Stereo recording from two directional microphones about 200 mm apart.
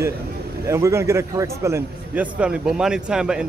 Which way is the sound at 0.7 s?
15° right (ahead or behind).